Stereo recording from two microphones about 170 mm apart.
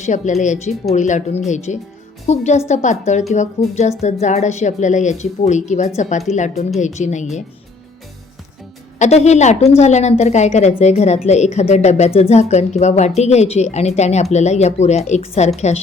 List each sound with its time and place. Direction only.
0.0 s speech: 45° left (ahead or behind)
9.0 s speech: 40° left (ahead or behind)